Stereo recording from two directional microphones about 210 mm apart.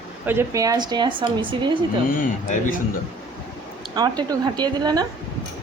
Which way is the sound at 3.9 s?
20° right (ahead or behind).